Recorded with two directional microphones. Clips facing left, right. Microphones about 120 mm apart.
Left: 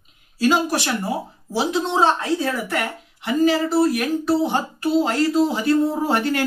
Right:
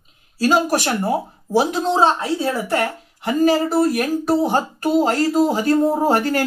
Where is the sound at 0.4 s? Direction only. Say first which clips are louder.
Right 2 dB; 40° right (ahead or behind).